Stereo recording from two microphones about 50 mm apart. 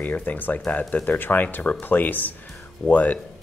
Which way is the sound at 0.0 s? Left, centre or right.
Left.